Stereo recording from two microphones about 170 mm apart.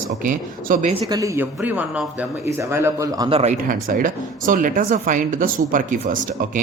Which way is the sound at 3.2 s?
35° right (ahead or behind).